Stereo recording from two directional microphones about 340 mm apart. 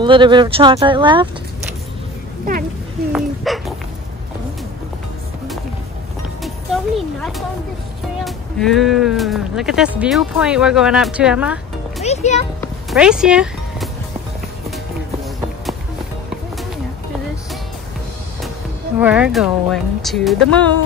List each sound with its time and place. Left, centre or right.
0.0 s speech: centre
3.1 s dog: centre
6.4 s music: centre
8.2 s speech: centre
12.0 s music: centre
12.5 s music: centre
18.9 s speech: centre